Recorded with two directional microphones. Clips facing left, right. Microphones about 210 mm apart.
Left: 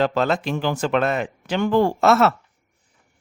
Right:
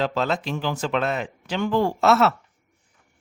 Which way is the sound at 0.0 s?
55° left (ahead or behind).